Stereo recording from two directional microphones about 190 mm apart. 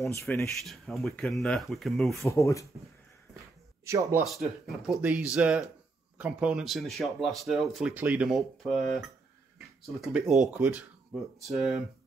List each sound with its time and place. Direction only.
0.2 s speech: 5° left (ahead or behind)
2.1 s speech: 15° left (ahead or behind)
3.8 s a man's voice: 15° right (ahead or behind)
4.3 s speech: centre (ahead or behind)